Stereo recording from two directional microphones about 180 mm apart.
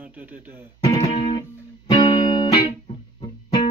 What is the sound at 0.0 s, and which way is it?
Speech, 10° right (ahead or behind).